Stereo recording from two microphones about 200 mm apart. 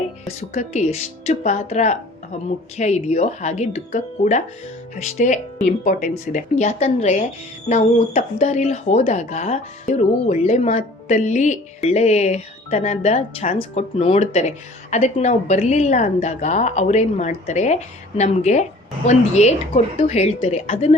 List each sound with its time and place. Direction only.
0.5 s speech: 35° left (ahead or behind)